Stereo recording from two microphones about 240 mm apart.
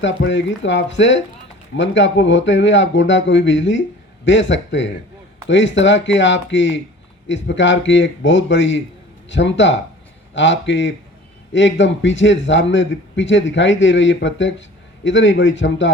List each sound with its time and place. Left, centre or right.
0.0 s a man's voice: left